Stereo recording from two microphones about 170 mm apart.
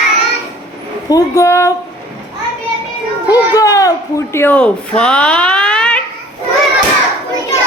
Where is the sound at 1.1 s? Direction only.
20° left (ahead or behind).